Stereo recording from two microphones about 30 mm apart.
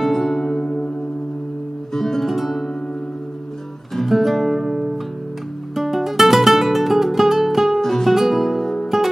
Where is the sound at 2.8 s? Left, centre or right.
Left.